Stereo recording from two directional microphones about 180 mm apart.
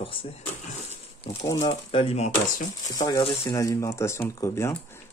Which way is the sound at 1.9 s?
30° left (ahead or behind).